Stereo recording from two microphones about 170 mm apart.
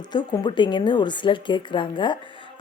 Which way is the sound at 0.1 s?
25° left (ahead or behind).